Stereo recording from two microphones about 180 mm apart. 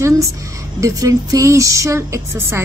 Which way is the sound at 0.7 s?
20° right (ahead or behind).